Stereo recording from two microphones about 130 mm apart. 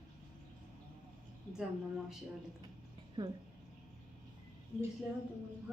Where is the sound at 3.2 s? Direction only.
35° right (ahead or behind).